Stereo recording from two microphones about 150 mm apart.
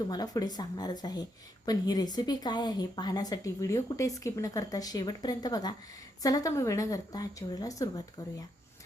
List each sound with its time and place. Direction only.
0.1 s a woman's voice: 25° left (ahead or behind)